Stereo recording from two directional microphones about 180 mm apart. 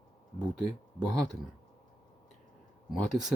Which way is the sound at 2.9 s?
Centre (ahead or behind).